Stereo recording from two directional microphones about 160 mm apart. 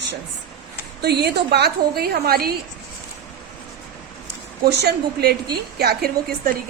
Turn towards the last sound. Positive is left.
turn(degrees=-80)